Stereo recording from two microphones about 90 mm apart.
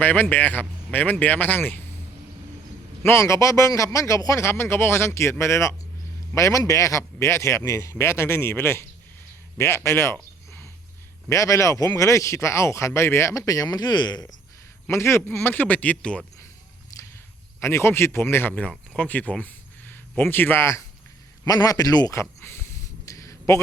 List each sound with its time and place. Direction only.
0.0 s speech: 20° left (ahead or behind)
3.0 s speech: 30° left (ahead or behind); by 14.3 s 50° left (ahead or behind)
14.8 s speech: 30° left (ahead or behind); by 16.2 s 10° left (ahead or behind)
16.9 s walk: 35° left (ahead or behind)
17.6 s speech: 30° left (ahead or behind)
21.4 s a man's voice: 40° left (ahead or behind)
22.1 s a sound: 30° left (ahead or behind)